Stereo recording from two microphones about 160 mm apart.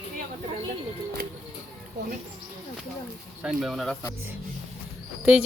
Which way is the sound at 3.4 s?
Centre (ahead or behind).